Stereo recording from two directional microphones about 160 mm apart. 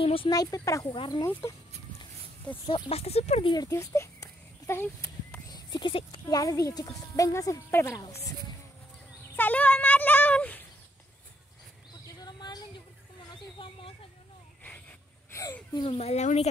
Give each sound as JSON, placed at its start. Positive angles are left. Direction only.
{"t": 0.0, "sound": "speech", "side_deg": 35}
{"t": 0.3, "sound": "speech", "side_deg": 20}
{"t": 2.6, "sound": "speech", "side_deg": 35}
{"t": 3.5, "sound": "a sound", "side_deg": 20}
{"t": 5.5, "sound": "speech", "side_deg": 30}
{"t": 9.4, "sound": "speech", "side_deg": 10}
{"t": 12.2, "sound": "a sound", "side_deg": 25}
{"t": 14.6, "sound": "wheeze", "side_deg": 10}
{"t": 15.7, "sound": "speech", "side_deg": 30}
{"t": 16.0, "sound": "speech", "side_deg": 45}